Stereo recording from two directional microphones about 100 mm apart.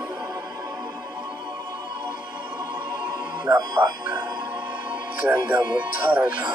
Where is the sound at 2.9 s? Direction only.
15° right (ahead or behind).